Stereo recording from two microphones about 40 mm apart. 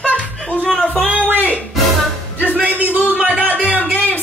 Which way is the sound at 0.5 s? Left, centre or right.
Left.